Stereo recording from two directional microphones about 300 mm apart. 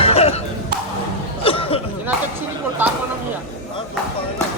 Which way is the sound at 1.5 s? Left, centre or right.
Centre.